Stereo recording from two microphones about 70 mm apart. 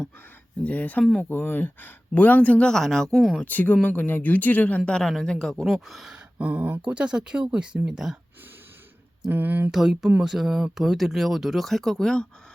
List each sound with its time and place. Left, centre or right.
0.6 s a man's voice: left; by 3.4 s centre
3.4 s a man's voice: left
4.9 s speech: centre
6.4 s speech: right
9.3 s speech: right
9.7 s speech: centre